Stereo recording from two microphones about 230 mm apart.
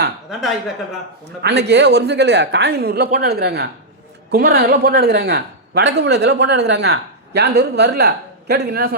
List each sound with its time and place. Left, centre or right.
1.4 s a man's voice: right